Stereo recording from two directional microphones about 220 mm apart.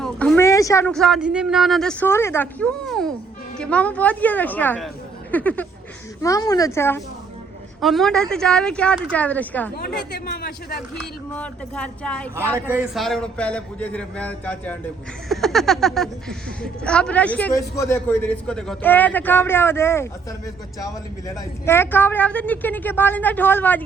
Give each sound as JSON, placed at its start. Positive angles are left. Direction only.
{"t": 0.0, "sound": "a man's voice", "side_deg": 5}
{"t": 7.8, "sound": "a man's voice", "side_deg": 0}
{"t": 10.1, "sound": "speech", "side_deg": 45}
{"t": 11.3, "sound": "a man's voice", "side_deg": 5}
{"t": 12.5, "sound": "a man's voice", "side_deg": -10}